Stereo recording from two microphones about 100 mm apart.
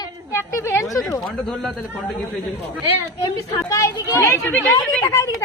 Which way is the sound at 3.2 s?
35° left (ahead or behind).